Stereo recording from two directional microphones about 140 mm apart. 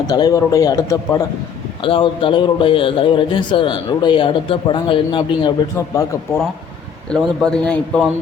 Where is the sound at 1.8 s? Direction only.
40° left (ahead or behind).